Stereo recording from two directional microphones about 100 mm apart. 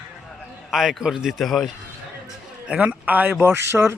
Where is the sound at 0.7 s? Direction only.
5° right (ahead or behind).